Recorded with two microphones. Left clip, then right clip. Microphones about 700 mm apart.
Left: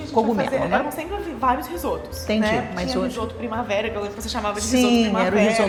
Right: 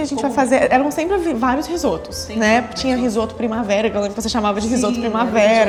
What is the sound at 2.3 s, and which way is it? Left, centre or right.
Speech, left.